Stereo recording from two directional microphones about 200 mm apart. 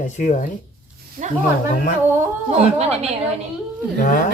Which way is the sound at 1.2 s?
45° right (ahead or behind).